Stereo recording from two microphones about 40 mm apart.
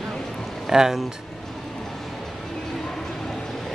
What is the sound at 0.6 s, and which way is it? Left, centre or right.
Speech, centre.